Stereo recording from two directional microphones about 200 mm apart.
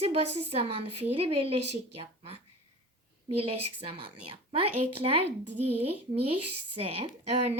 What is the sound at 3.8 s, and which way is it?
Speech, 30° right (ahead or behind).